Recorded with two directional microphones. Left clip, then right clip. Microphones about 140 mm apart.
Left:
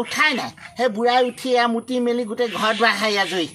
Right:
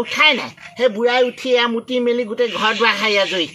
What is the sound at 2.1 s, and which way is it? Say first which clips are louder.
Speech: right 4 dB; 25° left (ahead or behind).